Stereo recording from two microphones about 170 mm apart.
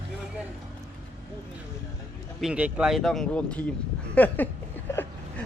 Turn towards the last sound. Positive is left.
turn(degrees=15)  # may be behind; listen again after turning